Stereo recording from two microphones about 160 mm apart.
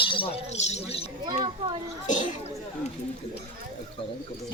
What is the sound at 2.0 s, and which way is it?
Chatter, 50° left (ahead or behind).